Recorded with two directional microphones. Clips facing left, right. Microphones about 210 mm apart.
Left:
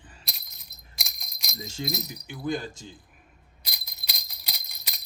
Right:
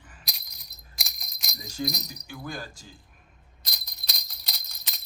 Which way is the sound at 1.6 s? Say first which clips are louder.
Even; 25° left (ahead or behind).